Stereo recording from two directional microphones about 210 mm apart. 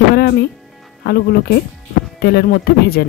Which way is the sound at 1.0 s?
45° left (ahead or behind).